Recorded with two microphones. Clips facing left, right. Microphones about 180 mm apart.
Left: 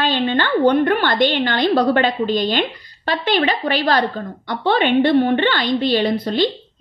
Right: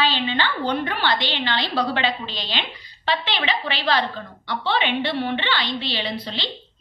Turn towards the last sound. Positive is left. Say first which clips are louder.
# left 11 dB
turn(degrees=50)  # may be behind; listen again after turning